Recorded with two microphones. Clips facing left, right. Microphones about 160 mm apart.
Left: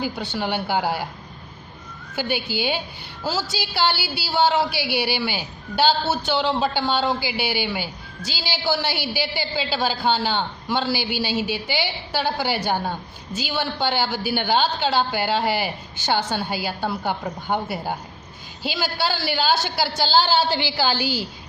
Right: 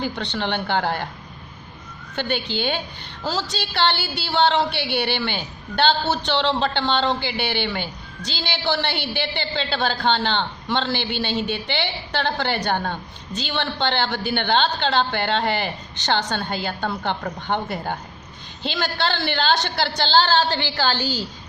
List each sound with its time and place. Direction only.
0.0 s a woman's voice: 5° left (ahead or behind)
2.1 s a woman's voice: 5° left (ahead or behind)